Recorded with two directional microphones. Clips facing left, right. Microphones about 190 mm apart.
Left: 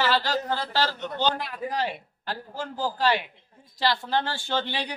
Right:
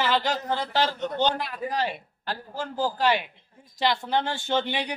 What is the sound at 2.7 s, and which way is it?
A woman's voice, 20° right (ahead or behind).